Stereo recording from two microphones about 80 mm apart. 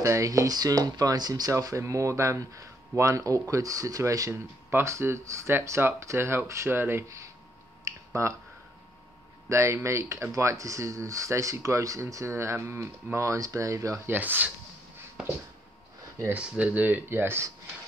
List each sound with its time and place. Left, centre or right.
0.0 s speech: right
7.8 s a sound: right
9.5 s speech: right
16.3 s speech: centre